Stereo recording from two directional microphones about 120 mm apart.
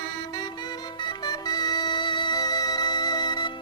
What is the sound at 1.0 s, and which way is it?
Music, 35° left (ahead or behind).